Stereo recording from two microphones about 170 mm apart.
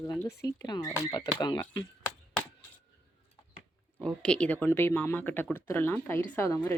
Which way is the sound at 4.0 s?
5° left (ahead or behind).